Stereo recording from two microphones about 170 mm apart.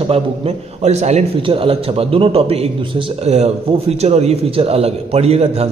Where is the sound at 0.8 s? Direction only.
40° right (ahead or behind).